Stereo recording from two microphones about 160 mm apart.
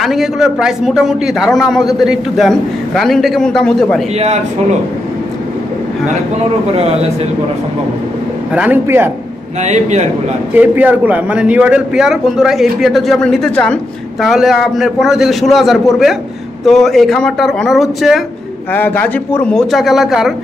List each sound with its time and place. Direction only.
0.0 s a man's voice: centre (ahead or behind)
4.2 s speech: 45° right (ahead or behind)
8.5 s a man's voice: 10° right (ahead or behind)
9.6 s speech: 45° right (ahead or behind)
10.5 s a man's voice: 10° right (ahead or behind)
18.7 s a man's voice: 10° left (ahead or behind)